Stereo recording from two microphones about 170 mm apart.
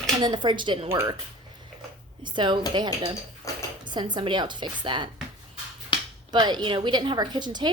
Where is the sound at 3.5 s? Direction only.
20° left (ahead or behind).